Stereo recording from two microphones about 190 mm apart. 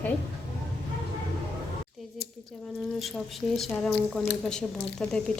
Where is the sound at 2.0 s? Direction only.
Centre (ahead or behind).